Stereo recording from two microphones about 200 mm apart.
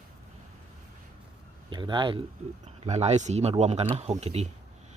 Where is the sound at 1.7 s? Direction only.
25° right (ahead or behind).